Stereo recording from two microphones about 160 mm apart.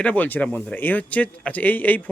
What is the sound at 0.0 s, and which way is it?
Speech, 10° left (ahead or behind).